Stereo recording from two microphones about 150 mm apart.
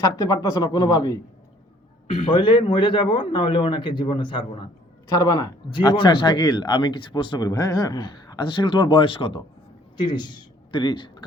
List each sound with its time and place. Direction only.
0.2 s speech: 25° left (ahead or behind)
2.2 s speech: 35° left (ahead or behind)